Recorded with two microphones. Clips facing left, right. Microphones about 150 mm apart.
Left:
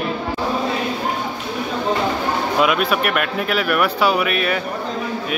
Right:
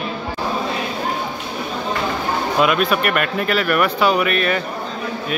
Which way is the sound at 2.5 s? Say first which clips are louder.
Right 1 dB; 5° left (ahead or behind).